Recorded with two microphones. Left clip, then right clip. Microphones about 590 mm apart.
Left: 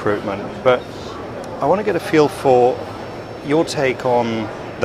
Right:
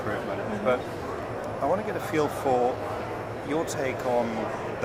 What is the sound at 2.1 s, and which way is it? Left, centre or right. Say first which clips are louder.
Speech: left 12 dB; left.